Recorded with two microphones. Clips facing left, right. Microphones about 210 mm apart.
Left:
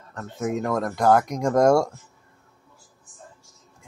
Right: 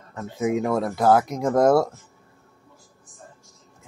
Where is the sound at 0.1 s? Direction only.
5° right (ahead or behind).